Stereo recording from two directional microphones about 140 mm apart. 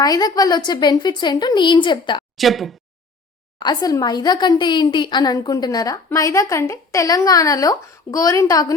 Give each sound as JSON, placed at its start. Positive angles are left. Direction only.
{"t": 0.0, "sound": "a woman's voice", "side_deg": 30}
{"t": 2.3, "sound": "a woman's voice", "side_deg": 0}
{"t": 3.6, "sound": "a woman's voice", "side_deg": 30}